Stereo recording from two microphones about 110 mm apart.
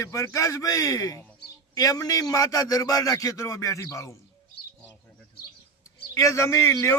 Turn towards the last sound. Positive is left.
turn(degrees=25)  # may be behind; listen again after turning